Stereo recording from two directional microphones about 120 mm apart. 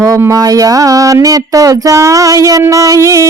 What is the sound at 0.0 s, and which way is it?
Speech, 25° right (ahead or behind).